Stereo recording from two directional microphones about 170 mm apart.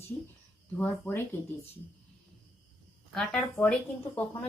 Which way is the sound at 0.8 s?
10° left (ahead or behind).